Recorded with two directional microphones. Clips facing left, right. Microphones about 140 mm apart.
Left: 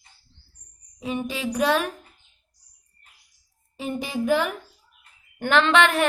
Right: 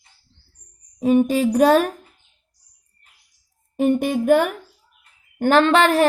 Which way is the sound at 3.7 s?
55° right (ahead or behind).